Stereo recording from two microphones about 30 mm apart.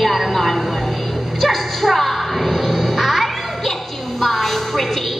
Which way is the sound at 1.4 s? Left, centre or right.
Centre.